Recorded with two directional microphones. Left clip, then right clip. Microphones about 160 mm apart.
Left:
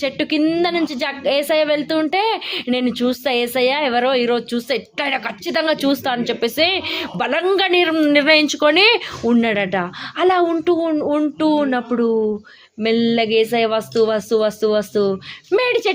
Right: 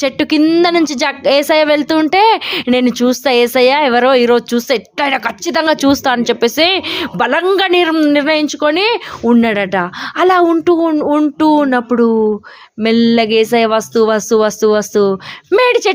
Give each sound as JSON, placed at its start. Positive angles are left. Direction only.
{"t": 0.0, "sound": "a woman's voice", "side_deg": -50}
{"t": 9.2, "sound": "a woman's voice", "side_deg": -40}